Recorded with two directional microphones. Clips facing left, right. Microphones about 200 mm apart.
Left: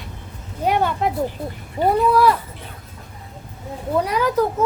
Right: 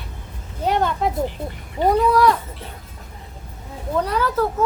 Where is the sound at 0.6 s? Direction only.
10° left (ahead or behind).